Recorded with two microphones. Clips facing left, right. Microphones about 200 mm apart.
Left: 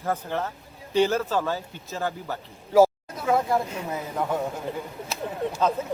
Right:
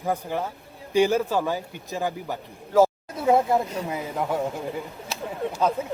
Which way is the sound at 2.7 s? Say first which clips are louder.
Left 1 dB; 10° left (ahead or behind).